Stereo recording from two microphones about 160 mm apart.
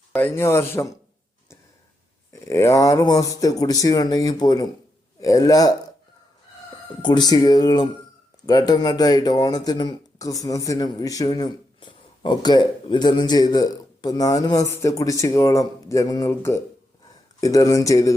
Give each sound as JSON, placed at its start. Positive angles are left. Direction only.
{"t": 0.2, "sound": "a man's voice", "side_deg": 15}
{"t": 2.3, "sound": "speech", "side_deg": 20}
{"t": 7.0, "sound": "speech", "side_deg": 25}